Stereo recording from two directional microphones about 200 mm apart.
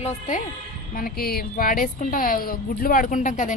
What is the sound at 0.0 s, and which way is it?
A woman's voice, 40° left (ahead or behind).